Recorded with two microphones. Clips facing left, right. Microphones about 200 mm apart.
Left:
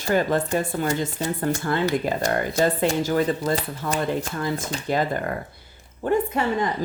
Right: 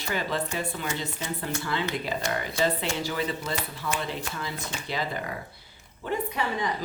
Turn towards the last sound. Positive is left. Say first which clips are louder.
# left 7 dB
turn(degrees=50)  # may be behind; listen again after turning